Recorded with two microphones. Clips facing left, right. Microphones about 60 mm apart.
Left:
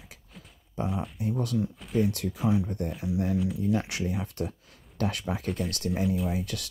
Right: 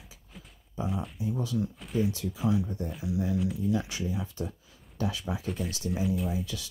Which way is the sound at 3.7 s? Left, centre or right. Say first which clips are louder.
Left 2 dB; left.